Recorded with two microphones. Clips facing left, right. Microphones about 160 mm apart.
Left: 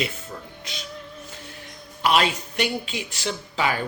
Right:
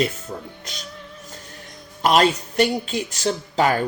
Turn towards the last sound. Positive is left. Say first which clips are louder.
# right 6 dB
turn(degrees=-45)  # may be behind; listen again after turning